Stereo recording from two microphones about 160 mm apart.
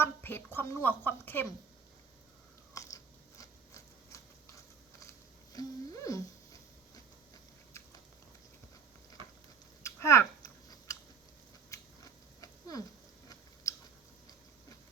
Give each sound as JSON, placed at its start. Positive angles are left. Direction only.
{"t": 0.0, "sound": "a woman's voice", "side_deg": 15}
{"t": 2.7, "sound": "biting", "side_deg": 20}
{"t": 5.5, "sound": "a sound", "side_deg": 20}
{"t": 9.8, "sound": "scissors", "side_deg": 20}
{"t": 11.7, "sound": "biting", "side_deg": 20}
{"t": 12.4, "sound": "a sound", "side_deg": 25}